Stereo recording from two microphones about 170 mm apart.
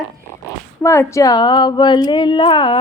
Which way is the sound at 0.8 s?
15° left (ahead or behind).